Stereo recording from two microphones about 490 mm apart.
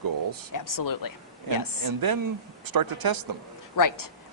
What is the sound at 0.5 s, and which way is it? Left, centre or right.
Speech, left.